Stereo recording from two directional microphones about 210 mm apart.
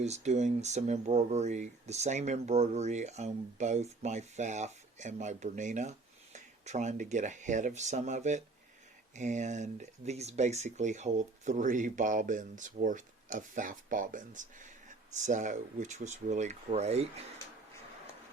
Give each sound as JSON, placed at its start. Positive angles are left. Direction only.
{"t": 0.0, "sound": "speech", "side_deg": -30}